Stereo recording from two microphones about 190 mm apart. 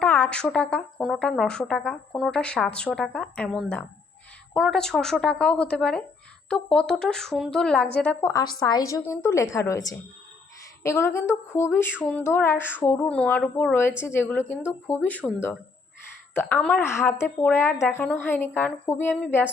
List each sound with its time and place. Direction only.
0.0 s a woman's voice: 5° left (ahead or behind)
16.3 s speech: 10° left (ahead or behind)